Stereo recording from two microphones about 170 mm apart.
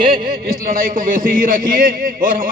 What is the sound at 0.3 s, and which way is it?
A man's voice, 55° right (ahead or behind).